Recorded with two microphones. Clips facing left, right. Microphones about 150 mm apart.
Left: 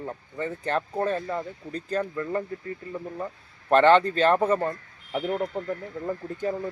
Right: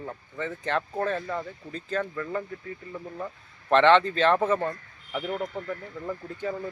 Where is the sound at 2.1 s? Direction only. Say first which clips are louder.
Left 3 dB; 25° left (ahead or behind).